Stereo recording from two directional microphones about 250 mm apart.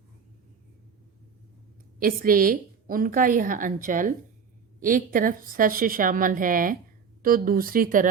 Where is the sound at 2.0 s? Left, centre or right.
Right.